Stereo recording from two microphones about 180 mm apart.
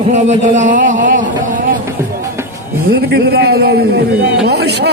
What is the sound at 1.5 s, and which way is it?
Music, 50° right (ahead or behind).